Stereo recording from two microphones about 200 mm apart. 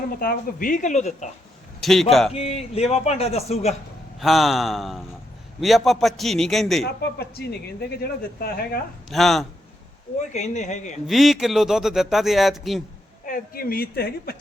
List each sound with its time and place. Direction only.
0.2 s a man's voice: 45° left (ahead or behind)
1.8 s speech: centre (ahead or behind)
2.3 s a man's voice: 30° left (ahead or behind)
4.2 s speech: centre (ahead or behind)
7.2 s a woman's voice: 55° left (ahead or behind)
9.0 s speech: centre (ahead or behind)
10.3 s a man's voice: 35° left (ahead or behind)
11.0 s speech: centre (ahead or behind)
13.2 s a woman's voice: 45° left (ahead or behind)